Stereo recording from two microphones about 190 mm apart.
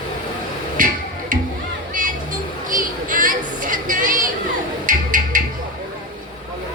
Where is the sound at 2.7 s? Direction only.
45° right (ahead or behind).